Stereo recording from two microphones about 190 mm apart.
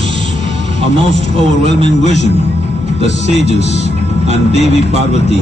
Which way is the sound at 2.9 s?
35° left (ahead or behind).